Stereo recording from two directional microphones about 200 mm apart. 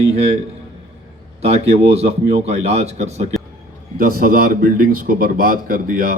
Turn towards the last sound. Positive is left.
turn(degrees=-45)  # may be behind; listen again after turning